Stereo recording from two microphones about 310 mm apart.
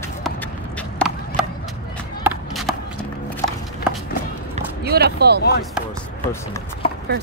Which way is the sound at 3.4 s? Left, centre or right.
Centre.